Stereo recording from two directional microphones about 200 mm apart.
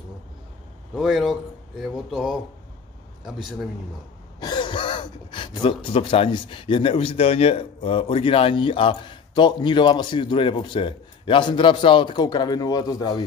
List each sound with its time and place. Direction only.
0.9 s speech: centre (ahead or behind)
4.4 s speech: 20° left (ahead or behind)